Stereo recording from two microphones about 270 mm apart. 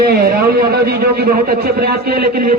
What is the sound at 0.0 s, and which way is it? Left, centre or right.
A man's voice, right.